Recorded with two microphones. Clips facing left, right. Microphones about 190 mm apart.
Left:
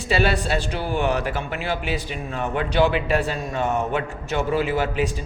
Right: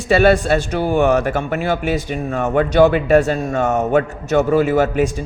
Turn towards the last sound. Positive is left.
turn(degrees=-50)  # may be behind; listen again after turning